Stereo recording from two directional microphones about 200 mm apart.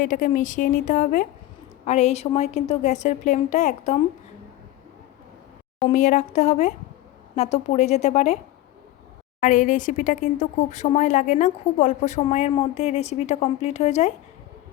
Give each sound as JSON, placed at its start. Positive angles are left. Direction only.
{"t": 0.0, "sound": "speech", "side_deg": 40}
{"t": 5.9, "sound": "speech", "side_deg": 35}
{"t": 9.4, "sound": "speech", "side_deg": 40}